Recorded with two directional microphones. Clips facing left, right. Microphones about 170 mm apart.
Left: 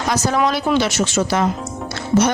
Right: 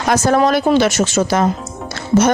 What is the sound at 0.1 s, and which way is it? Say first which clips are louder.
Speech: right 5 dB; 50° right (ahead or behind).